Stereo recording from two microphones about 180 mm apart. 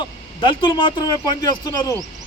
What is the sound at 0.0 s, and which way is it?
Speech, 25° left (ahead or behind).